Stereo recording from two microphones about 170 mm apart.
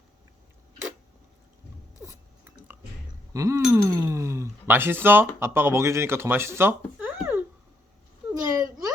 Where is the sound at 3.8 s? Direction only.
15° right (ahead or behind).